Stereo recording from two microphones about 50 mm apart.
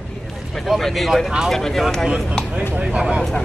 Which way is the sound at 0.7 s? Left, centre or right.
Centre.